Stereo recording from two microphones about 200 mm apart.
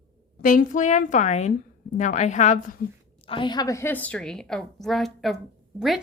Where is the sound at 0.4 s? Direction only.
40° left (ahead or behind).